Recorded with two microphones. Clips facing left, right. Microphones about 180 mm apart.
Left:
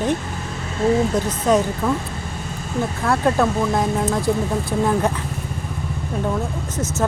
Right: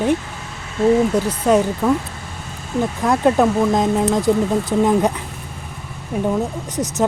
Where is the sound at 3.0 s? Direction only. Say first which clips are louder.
Right 3 dB; 15° right (ahead or behind).